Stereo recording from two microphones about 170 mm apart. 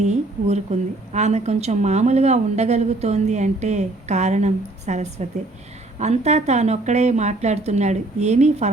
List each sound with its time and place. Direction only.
0.0 s a woman's voice: 40° right (ahead or behind)